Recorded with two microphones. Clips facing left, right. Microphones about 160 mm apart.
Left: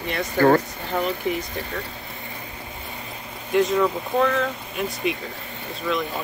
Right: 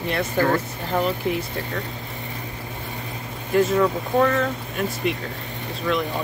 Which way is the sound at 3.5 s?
Centre (ahead or behind).